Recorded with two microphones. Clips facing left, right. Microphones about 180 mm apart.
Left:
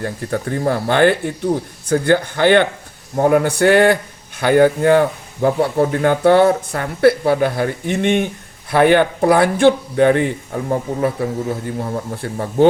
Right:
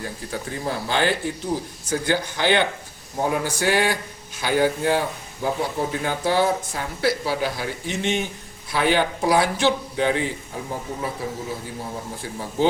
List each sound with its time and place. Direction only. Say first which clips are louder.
0.0 s speech: left 8 dB; 60° left (ahead or behind)